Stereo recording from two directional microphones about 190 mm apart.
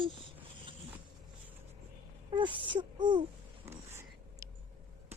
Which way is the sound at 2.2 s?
25° right (ahead or behind).